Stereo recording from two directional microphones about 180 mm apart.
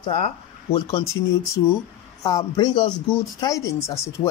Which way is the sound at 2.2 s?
20° left (ahead or behind).